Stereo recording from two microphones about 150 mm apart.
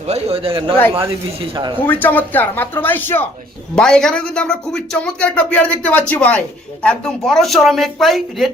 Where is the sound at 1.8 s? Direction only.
10° left (ahead or behind).